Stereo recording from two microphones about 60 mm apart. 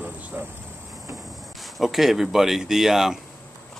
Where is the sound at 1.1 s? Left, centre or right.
Centre.